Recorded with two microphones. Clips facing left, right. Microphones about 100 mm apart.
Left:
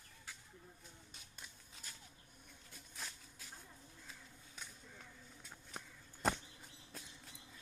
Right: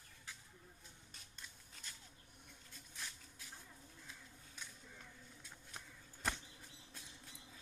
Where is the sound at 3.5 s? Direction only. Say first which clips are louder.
Left 1 dB; 5° left (ahead or behind).